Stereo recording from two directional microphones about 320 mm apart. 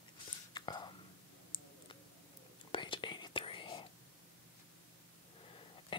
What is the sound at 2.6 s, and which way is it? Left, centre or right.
Whispering, centre.